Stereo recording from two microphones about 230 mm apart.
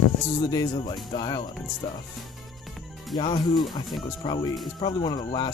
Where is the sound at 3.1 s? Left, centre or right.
Left.